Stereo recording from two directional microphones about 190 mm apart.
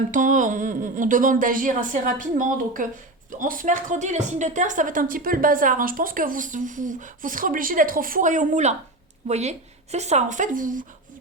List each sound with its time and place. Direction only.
0.1 s a woman's voice: 40° right (ahead or behind)